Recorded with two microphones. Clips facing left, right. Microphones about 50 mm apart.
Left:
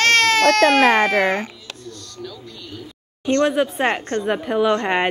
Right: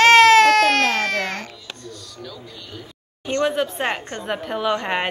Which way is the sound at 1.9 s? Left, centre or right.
Centre.